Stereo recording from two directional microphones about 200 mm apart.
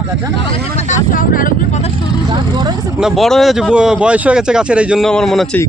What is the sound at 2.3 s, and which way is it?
Speech, 20° right (ahead or behind).